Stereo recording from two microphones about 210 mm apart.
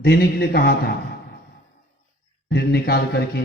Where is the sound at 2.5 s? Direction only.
50° left (ahead or behind).